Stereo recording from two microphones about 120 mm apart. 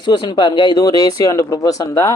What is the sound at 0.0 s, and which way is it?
Speech, 40° left (ahead or behind).